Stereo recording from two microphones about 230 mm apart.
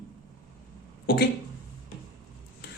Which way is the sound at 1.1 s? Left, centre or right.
Left.